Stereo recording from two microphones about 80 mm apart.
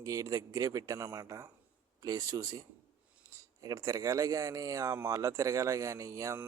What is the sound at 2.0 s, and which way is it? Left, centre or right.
A man's voice, right.